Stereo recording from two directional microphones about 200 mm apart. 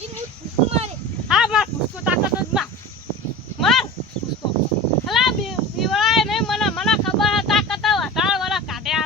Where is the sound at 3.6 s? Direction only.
Centre (ahead or behind).